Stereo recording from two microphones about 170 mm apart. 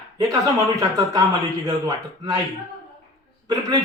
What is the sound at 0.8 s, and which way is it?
Speech, 20° right (ahead or behind).